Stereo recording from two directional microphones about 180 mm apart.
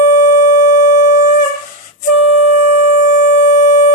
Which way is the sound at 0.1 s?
40° left (ahead or behind).